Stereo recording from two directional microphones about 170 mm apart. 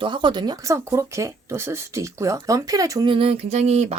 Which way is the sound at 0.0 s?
30° right (ahead or behind).